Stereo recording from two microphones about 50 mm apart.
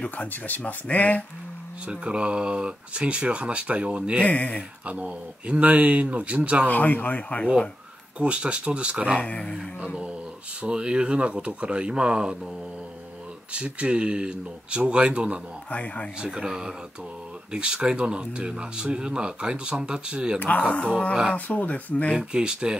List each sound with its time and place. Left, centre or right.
0.3 s speech: left
1.9 s speech: right
4.2 s speech: left
4.8 s speech: right
6.7 s speech: left
8.2 s speech: right
9.2 s speech: left
10.6 s speech: centre
13.5 s speech: right
15.7 s speech: left
16.2 s speech: centre
20.3 s speech: left
22.1 s speech: centre